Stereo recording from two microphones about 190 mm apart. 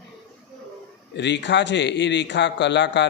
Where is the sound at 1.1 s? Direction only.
65° left (ahead or behind).